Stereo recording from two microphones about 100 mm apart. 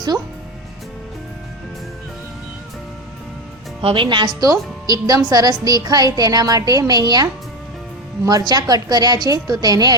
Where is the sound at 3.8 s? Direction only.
65° right (ahead or behind).